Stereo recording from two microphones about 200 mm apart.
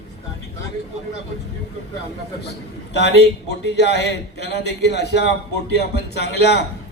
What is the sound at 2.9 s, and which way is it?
A man's voice, 60° left (ahead or behind).